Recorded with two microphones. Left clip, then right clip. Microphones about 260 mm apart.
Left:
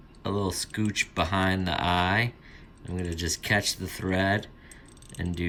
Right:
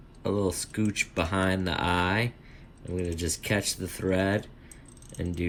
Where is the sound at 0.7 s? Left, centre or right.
Centre.